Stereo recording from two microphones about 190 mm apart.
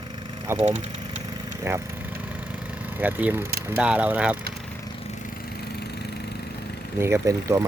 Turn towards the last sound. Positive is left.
turn(degrees=-15)  # may be behind; listen again after turning